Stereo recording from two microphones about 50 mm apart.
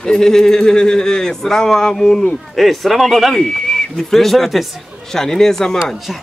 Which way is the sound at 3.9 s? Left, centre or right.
Centre.